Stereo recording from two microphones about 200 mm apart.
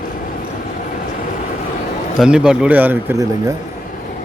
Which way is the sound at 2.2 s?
5° right (ahead or behind).